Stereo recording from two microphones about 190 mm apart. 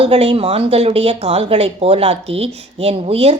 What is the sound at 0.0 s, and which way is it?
Speech, 30° right (ahead or behind).